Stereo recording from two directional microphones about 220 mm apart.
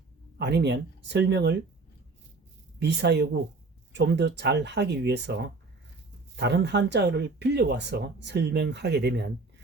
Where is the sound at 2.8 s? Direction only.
50° right (ahead or behind).